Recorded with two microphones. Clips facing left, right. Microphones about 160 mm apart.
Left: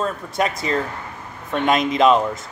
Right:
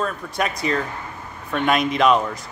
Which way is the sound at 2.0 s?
25° left (ahead or behind).